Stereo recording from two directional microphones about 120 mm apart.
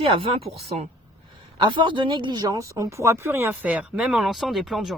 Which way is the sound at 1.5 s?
45° right (ahead or behind).